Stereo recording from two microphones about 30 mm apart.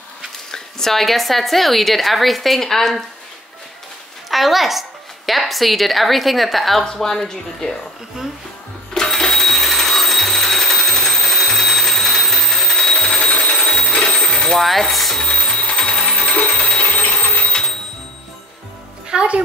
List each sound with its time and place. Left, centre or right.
0.5 s dog: centre
0.9 s speech: centre
4.3 s speech: centre
6.8 s a woman's voice: centre
8.9 s music: centre
11.6 s alarm clock: centre
12.9 s alarm clock: left
13.6 s a sound: left
14.6 s speech: centre
15.1 s music: left
15.8 s a sound: left
16.9 s a sound: left
19.1 s a woman's voice: right